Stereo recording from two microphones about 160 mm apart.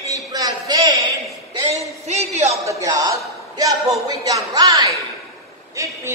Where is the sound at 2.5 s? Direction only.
20° right (ahead or behind).